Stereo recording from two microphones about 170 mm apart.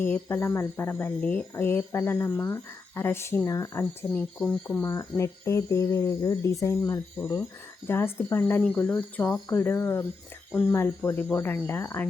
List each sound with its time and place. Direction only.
0.0 s speech: 15° left (ahead or behind)
4.4 s speech: 5° left (ahead or behind)